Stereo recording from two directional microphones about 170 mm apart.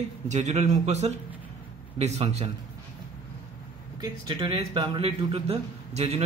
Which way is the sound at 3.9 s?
25° right (ahead or behind).